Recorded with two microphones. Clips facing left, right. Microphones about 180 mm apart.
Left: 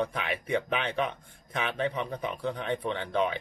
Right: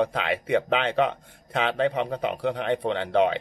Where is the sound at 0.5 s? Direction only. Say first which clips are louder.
Right 6 dB; 65° right (ahead or behind).